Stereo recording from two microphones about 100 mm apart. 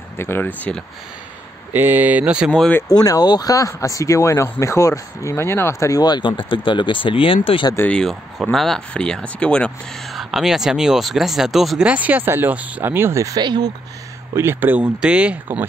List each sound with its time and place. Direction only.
0.2 s speech: 25° left (ahead or behind)
0.6 s speech: 10° left (ahead or behind)
1.7 s speech: 20° right (ahead or behind)
2.9 s speech: 40° left (ahead or behind); by 7.6 s 65° left (ahead or behind)
7.9 s speech: 5° left (ahead or behind)
10.1 s speech: 5° right (ahead or behind)
11.9 s speech: 15° right (ahead or behind); by 13.4 s 30° right (ahead or behind)
13.4 s speech: 45° right (ahead or behind)
14.3 s speech: 25° right (ahead or behind)